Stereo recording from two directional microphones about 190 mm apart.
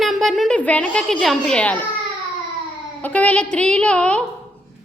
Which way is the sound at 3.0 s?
5° left (ahead or behind).